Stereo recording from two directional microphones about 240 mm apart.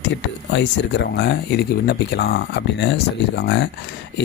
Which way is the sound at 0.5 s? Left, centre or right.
Left.